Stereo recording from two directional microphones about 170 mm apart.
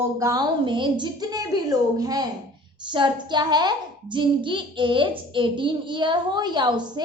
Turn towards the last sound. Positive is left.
turn(degrees=-25)  # may be behind; listen again after turning